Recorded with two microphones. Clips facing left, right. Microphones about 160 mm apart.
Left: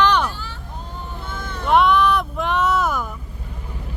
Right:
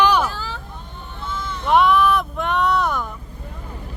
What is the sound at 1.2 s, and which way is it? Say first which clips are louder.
Vehicle: right 7 dB; 55° left (ahead or behind).